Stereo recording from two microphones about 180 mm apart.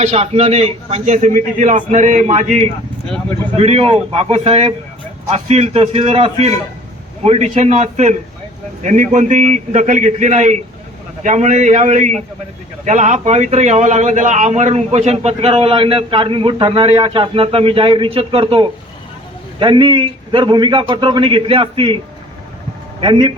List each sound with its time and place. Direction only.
0.0 s a man's voice: 35° right (ahead or behind)
23.0 s a man's voice: 25° right (ahead or behind)